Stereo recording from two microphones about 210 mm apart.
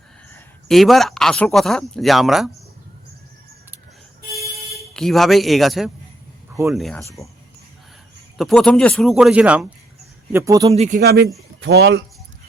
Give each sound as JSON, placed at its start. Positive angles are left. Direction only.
{"t": 0.3, "sound": "speech", "side_deg": 0}
{"t": 4.9, "sound": "speech", "side_deg": 0}
{"t": 8.4, "sound": "speech", "side_deg": 0}
{"t": 10.8, "sound": "speech", "side_deg": -40}